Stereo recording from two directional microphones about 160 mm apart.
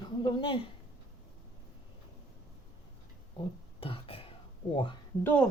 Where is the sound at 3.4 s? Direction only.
35° left (ahead or behind).